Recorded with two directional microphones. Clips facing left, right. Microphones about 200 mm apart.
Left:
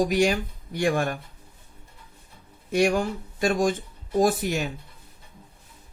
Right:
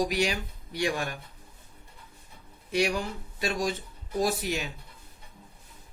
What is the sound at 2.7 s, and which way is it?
Speech, 50° left (ahead or behind).